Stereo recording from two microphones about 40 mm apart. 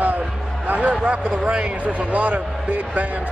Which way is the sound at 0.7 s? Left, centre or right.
Right.